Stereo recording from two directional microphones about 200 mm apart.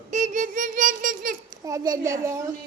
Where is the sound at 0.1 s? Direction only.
40° right (ahead or behind).